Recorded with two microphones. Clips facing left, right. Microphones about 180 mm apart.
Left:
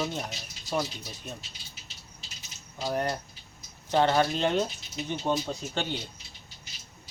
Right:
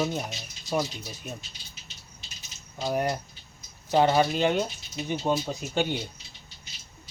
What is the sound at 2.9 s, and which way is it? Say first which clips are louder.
Speech: right 2 dB; 10° right (ahead or behind).